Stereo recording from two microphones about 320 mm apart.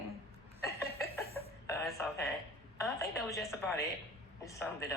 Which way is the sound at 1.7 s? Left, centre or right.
Centre.